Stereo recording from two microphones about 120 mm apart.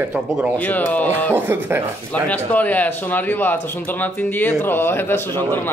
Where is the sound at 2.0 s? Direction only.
10° left (ahead or behind).